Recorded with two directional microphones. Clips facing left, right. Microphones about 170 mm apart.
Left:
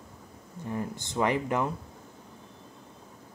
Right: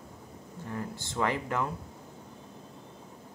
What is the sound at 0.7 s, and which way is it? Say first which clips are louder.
Speech: left 4 dB; 20° left (ahead or behind).